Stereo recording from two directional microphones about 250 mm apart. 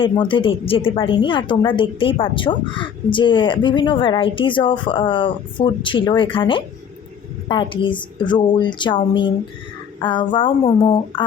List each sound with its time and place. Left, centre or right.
0.0 s a woman's voice: centre